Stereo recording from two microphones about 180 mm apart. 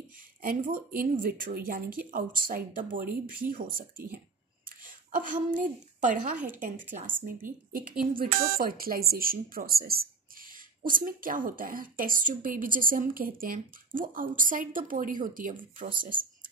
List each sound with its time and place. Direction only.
0.4 s a woman's voice: 50° right (ahead or behind)
15.9 s speech: 25° right (ahead or behind)